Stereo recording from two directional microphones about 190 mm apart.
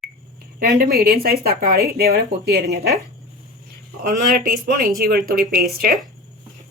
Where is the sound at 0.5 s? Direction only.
50° right (ahead or behind).